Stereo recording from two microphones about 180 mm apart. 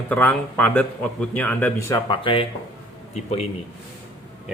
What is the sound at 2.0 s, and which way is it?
Speech, 30° left (ahead or behind).